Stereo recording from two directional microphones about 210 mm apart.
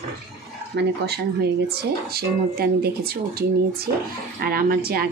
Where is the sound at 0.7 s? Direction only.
50° right (ahead or behind).